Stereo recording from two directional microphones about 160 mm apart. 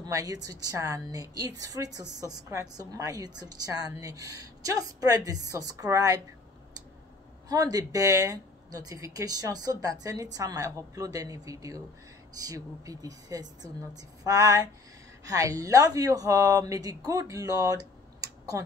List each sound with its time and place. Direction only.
0.0 s a woman's voice: 20° right (ahead or behind)
7.4 s a woman's voice: 25° right (ahead or behind)